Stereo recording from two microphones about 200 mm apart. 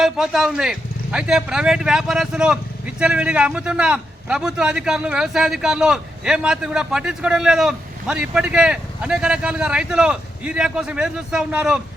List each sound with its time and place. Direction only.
0.0 s speech: centre (ahead or behind)